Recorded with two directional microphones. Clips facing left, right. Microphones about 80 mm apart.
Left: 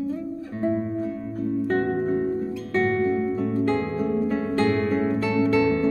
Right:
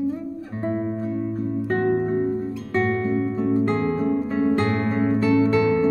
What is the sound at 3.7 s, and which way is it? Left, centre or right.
Music, centre.